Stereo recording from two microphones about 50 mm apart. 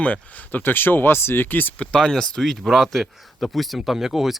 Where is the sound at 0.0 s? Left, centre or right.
Left.